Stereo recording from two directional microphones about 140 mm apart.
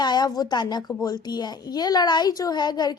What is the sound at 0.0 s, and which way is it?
A woman's voice, 30° left (ahead or behind).